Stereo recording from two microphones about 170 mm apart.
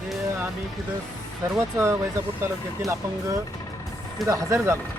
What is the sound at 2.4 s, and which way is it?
Speech, 15° right (ahead or behind).